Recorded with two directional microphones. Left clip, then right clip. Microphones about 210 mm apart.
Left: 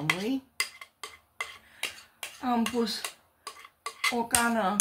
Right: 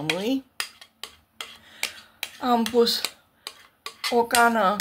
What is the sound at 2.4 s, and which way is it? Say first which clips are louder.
Speech: right 8 dB; 50° right (ahead or behind).